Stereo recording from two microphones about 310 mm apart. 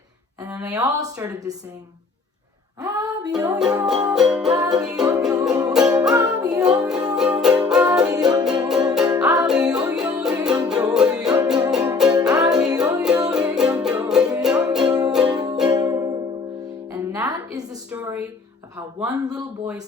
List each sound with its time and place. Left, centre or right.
0.4 s music: centre
2.8 s music: centre
16.9 s a sound: centre
19.1 s music: centre